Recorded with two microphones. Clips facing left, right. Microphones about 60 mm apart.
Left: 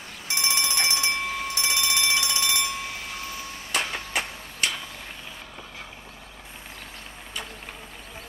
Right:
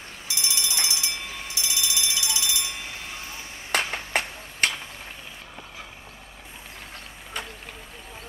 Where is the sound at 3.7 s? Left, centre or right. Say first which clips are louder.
Right 3 dB; right.